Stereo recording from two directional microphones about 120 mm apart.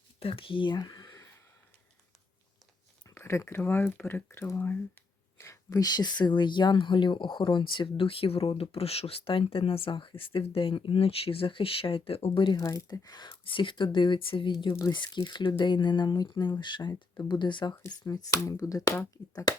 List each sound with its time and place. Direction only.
0.2 s speech: 50° left (ahead or behind); by 1.3 s 30° left (ahead or behind)
3.2 s speech: 20° left (ahead or behind); by 12.5 s 45° left (ahead or behind)
12.5 s speech: 30° left (ahead or behind)
18.0 s speech: 30° left (ahead or behind)